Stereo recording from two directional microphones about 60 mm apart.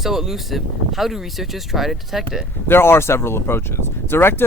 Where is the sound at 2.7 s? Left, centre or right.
Left.